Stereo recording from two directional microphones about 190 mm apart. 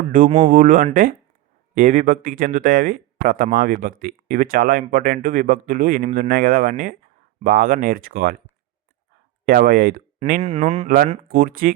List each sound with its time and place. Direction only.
0.3 s speech: 25° right (ahead or behind)
0.5 s speech: 45° right (ahead or behind)
9.5 s speech: 50° right (ahead or behind)
10.9 s speech: 45° right (ahead or behind)